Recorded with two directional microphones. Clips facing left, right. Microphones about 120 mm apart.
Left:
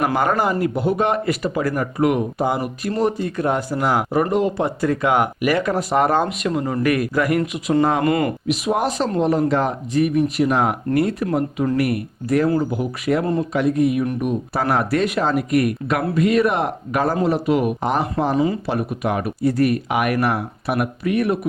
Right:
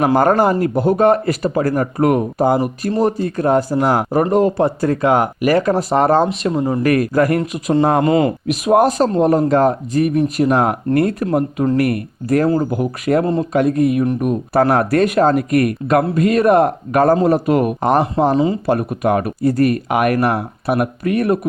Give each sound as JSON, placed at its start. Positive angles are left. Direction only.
{"t": 0.0, "sound": "speech", "side_deg": -40}
{"t": 6.8, "sound": "speech", "side_deg": -40}
{"t": 8.0, "sound": "speech", "side_deg": -20}
{"t": 8.4, "sound": "speech", "side_deg": -50}
{"t": 14.0, "sound": "speech", "side_deg": -40}